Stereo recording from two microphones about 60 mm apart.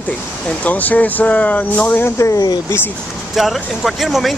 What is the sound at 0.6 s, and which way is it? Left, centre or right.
Speech, left.